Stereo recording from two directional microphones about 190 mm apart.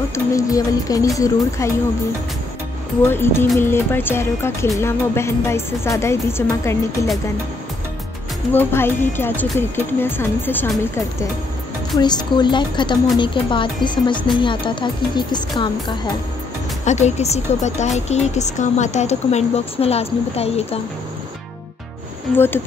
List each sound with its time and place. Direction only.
0.1 s speech: 15° left (ahead or behind)
3.0 s speech: 10° left (ahead or behind)
8.5 s speech: 10° left (ahead or behind)
12.0 s speech: 20° left (ahead or behind)
16.8 s speech: 35° left (ahead or behind)